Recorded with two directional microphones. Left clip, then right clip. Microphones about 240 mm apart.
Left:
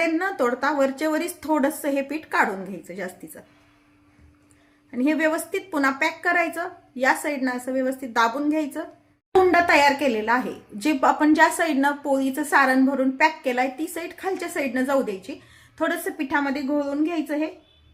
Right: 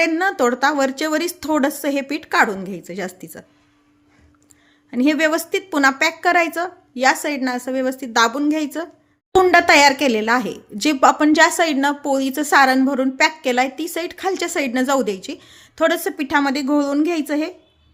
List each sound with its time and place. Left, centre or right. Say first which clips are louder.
0.0 s speech: right 5 dB; right
4.9 s a woman's voice: right 5 dB; right